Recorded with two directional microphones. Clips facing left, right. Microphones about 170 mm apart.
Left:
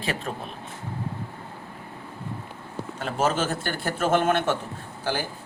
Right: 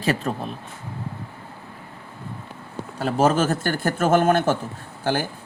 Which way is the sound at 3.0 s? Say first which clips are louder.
Right 6 dB; 40° right (ahead or behind).